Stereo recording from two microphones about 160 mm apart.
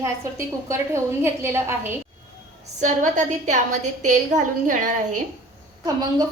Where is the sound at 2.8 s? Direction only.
50° right (ahead or behind).